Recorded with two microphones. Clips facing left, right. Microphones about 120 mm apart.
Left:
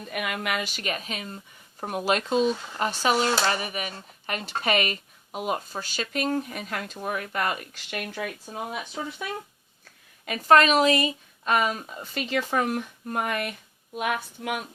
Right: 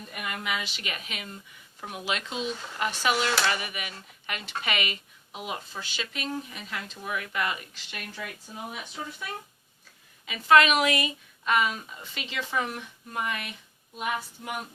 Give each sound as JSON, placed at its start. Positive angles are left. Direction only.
{"t": 0.1, "sound": "a woman's voice", "side_deg": 75}
{"t": 10.2, "sound": "a woman's voice", "side_deg": 45}
{"t": 11.5, "sound": "speech", "side_deg": 45}